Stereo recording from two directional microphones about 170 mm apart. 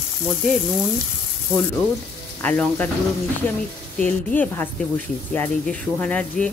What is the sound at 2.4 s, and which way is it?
Speech, 10° left (ahead or behind).